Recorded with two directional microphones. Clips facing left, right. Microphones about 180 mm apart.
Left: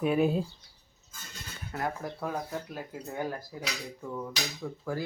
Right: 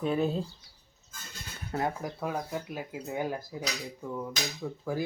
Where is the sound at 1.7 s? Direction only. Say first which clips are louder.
Right 3 dB; 25° right (ahead or behind).